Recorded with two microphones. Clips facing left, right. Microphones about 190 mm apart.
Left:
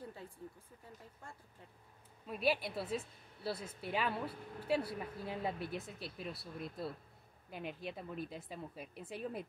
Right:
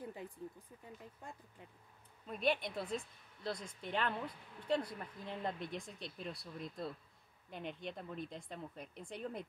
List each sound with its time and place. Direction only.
0.0 s speech: 15° right (ahead or behind)
2.2 s speech: 5° left (ahead or behind)